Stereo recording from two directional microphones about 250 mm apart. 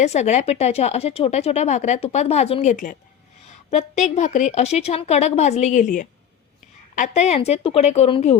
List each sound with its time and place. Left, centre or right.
0.0 s speech: left